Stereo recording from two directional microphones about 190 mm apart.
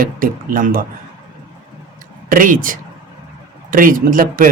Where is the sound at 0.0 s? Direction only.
45° right (ahead or behind).